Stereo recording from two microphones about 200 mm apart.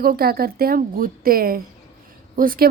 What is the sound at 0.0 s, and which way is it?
A woman's voice, 50° right (ahead or behind).